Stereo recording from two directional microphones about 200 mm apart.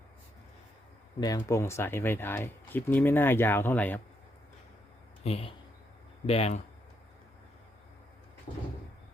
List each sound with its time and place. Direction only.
1.2 s speech: 15° left (ahead or behind)
5.2 s speech: 30° left (ahead or behind)